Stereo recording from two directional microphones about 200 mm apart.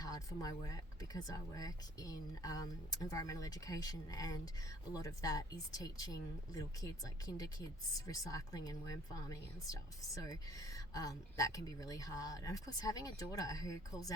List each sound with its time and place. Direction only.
0.0 s speech: 20° left (ahead or behind)